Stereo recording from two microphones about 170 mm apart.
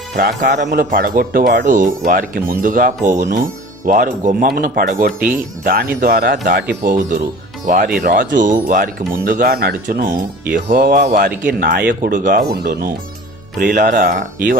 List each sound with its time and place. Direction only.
0.2 s speech: 85° right
0.7 s speech: 60° right (ahead or behind); by 6.6 s 80° right
6.8 s speech: 55° right (ahead or behind)
13.7 s speech: 50° right (ahead or behind)